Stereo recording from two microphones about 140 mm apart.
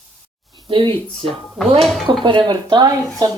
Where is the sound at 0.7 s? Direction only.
35° right (ahead or behind).